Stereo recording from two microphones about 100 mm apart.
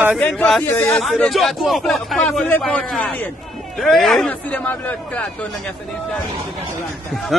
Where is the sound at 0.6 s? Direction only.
20° left (ahead or behind).